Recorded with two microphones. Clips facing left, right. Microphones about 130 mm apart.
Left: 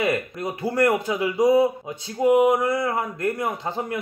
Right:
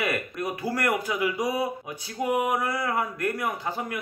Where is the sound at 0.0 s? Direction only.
25° left (ahead or behind).